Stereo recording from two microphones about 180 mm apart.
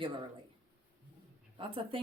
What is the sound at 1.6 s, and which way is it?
Speech, 30° right (ahead or behind).